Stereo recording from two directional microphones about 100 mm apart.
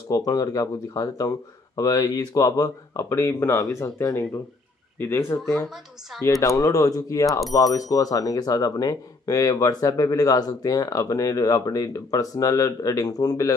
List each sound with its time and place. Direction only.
0.1 s speech: 35° left (ahead or behind)